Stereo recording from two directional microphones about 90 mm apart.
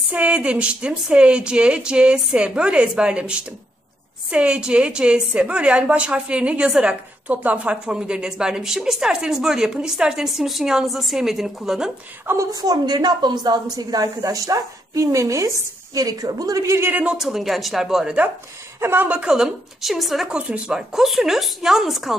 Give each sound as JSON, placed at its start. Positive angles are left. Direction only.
{"t": 0.1, "sound": "a woman's voice", "side_deg": -15}
{"t": 12.3, "sound": "a woman's voice", "side_deg": -40}
{"t": 16.9, "sound": "speech", "side_deg": -10}
{"t": 18.8, "sound": "a woman's voice", "side_deg": -25}
{"t": 20.2, "sound": "speech", "side_deg": -15}